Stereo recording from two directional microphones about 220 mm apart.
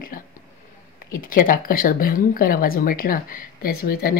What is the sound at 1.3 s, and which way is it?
Speech, 40° left (ahead or behind).